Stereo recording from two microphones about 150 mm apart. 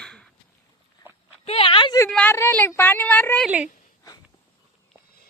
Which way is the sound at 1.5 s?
40° left (ahead or behind).